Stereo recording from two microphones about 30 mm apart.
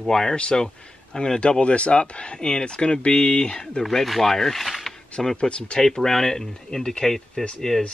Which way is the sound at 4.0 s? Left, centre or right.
Centre.